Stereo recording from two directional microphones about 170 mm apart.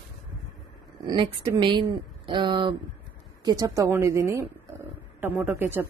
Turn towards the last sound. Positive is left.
turn(degrees=-15)  # may be behind; listen again after turning